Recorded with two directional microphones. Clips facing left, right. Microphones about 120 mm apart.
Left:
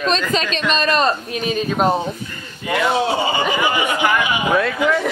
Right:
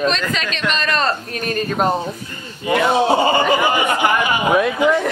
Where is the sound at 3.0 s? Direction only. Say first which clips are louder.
Right 4 dB; 50° right (ahead or behind).